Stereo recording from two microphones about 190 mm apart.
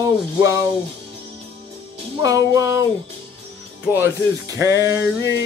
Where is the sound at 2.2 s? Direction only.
20° right (ahead or behind).